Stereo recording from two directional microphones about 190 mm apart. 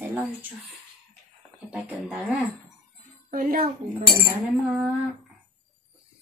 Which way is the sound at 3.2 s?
45° right (ahead or behind).